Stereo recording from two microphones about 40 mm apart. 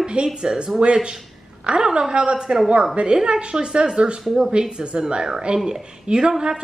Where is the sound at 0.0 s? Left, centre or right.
Right.